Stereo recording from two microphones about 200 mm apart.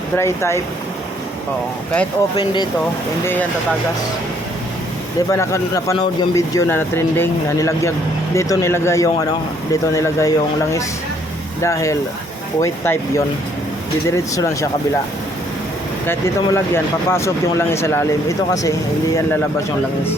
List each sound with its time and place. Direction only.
0.2 s speech: 15° left (ahead or behind)
2.4 s speech: 20° left (ahead or behind)
5.3 s speech: 15° left (ahead or behind)
16.0 s speech: 10° left (ahead or behind)